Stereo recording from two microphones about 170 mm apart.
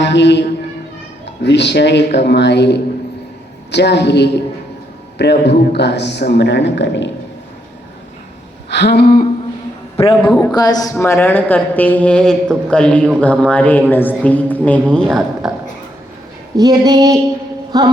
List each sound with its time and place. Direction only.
0.0 s a man's voice: 90° left
8.7 s a sound: 85° left; by 9.2 s 65° left (ahead or behind)
10.0 s a man's voice: 30° left (ahead or behind); by 15.5 s centre (ahead or behind)
16.6 s female singing: 25° right (ahead or behind)
17.7 s speech: 25° right (ahead or behind)